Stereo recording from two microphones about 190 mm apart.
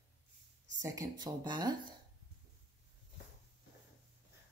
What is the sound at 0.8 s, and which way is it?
Speech, 20° right (ahead or behind).